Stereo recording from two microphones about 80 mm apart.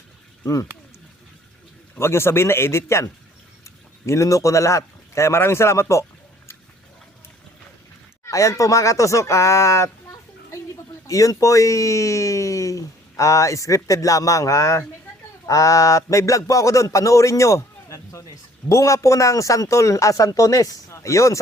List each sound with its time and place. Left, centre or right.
0.4 s a man's voice: left
2.0 s a man's voice: left
8.2 s a man's voice: left